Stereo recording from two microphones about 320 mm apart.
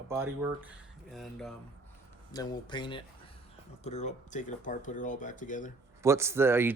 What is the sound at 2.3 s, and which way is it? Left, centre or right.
Speech, centre.